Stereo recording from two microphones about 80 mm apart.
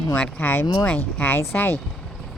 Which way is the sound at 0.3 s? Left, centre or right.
Left.